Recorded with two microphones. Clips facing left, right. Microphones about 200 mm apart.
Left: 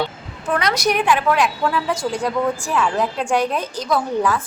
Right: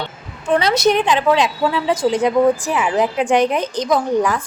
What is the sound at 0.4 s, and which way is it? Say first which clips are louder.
A woman's voice: right 5 dB; 25° right (ahead or behind).